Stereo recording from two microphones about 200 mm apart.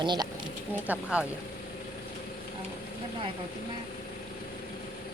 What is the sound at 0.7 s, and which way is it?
Speech, 5° right (ahead or behind).